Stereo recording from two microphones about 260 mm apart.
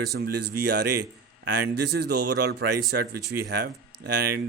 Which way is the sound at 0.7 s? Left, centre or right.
Right.